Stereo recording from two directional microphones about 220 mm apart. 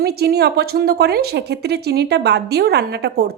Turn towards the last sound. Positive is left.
turn(degrees=-45)  # may be behind; listen again after turning